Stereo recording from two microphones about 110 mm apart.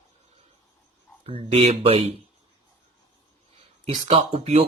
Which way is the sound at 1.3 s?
60° right (ahead or behind).